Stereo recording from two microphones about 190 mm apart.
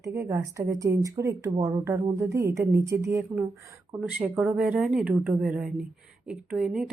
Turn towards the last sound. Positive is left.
turn(degrees=-5)  # may be behind; listen again after turning